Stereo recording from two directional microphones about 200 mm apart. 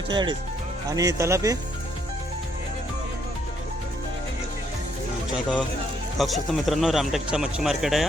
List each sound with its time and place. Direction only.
0.1 s speech: 20° right (ahead or behind)
6.1 s a man's voice: centre (ahead or behind)